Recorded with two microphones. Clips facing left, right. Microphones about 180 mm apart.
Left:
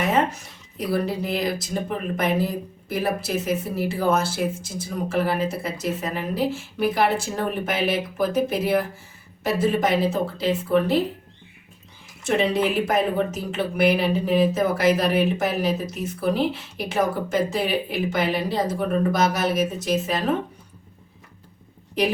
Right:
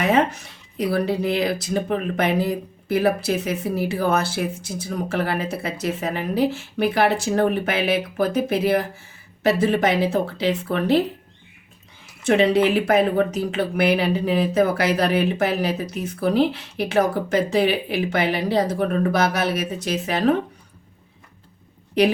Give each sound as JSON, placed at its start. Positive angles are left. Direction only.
{"t": 0.0, "sound": "speech", "side_deg": -70}
{"t": 12.3, "sound": "speech", "side_deg": -65}